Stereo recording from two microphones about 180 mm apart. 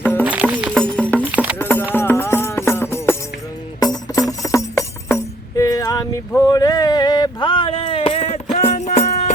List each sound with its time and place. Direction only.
0.0 s music: 10° left (ahead or behind)
0.3 s music: 10° right (ahead or behind)
1.2 s music: 10° right (ahead or behind)
1.5 s music: 10° left (ahead or behind); by 9.3 s 40° left (ahead or behind)